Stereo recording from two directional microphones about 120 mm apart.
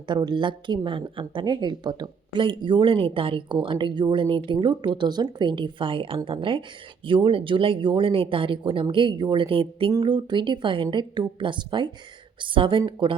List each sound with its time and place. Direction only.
0.1 s speech: 40° right (ahead or behind)